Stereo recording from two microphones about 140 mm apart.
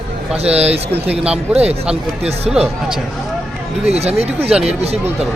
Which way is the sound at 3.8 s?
50° right (ahead or behind).